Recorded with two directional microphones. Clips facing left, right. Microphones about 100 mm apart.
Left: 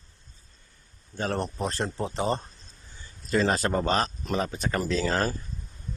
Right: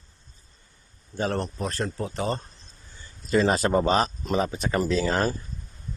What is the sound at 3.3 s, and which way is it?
Speech, 10° right (ahead or behind).